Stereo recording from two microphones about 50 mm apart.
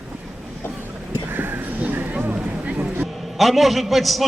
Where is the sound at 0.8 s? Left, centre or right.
Right.